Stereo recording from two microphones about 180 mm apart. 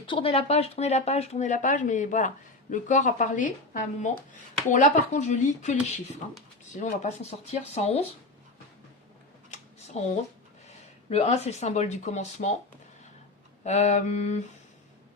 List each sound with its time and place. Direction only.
0.0 s speech: 30° left (ahead or behind)
9.5 s a sound: 40° left (ahead or behind)
11.1 s speech: 35° left (ahead or behind)
13.7 s speech: 40° left (ahead or behind)